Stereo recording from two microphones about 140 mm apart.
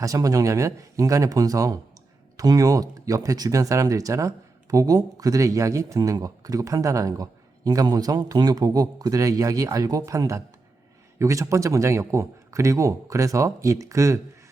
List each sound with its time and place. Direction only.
0.0 s speech: 25° right (ahead or behind)